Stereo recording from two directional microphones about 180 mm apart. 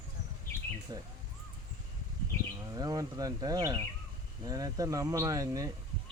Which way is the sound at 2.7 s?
20° right (ahead or behind).